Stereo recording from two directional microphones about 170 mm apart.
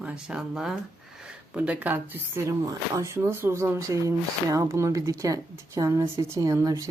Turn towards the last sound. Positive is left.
turn(degrees=-20)  # may be behind; listen again after turning